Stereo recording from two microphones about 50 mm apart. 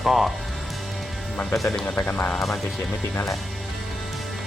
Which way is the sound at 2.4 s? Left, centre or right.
Centre.